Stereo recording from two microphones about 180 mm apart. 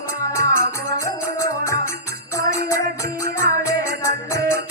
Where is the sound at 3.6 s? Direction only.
15° left (ahead or behind).